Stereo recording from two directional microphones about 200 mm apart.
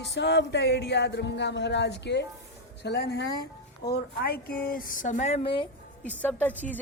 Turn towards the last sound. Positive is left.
turn(degrees=10)  # may be behind; listen again after turning